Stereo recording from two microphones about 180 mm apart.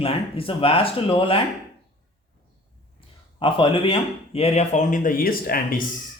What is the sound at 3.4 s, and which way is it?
Speech, 30° left (ahead or behind).